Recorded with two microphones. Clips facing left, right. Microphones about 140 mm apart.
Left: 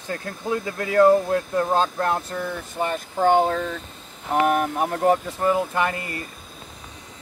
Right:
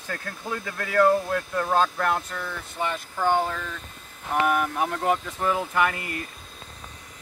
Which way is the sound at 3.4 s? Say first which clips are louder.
Left 7 dB; 35° left (ahead or behind).